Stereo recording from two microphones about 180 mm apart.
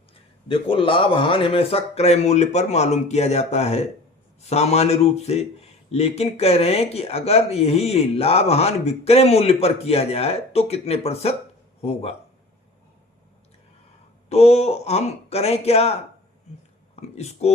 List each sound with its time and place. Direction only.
0.4 s speech: 30° left (ahead or behind)
14.3 s speech: 35° left (ahead or behind)